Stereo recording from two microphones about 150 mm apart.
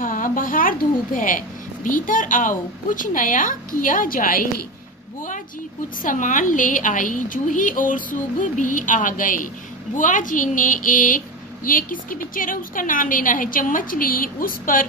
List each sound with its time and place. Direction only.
0.0 s speech: 65° left (ahead or behind)
6.0 s speech: 60° left (ahead or behind)